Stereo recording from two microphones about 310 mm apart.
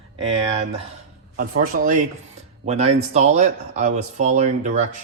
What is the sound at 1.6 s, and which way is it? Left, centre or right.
Speech, right.